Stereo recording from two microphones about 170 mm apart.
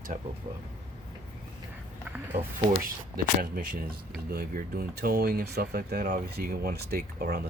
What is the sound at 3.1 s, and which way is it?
Speech, 55° right (ahead or behind).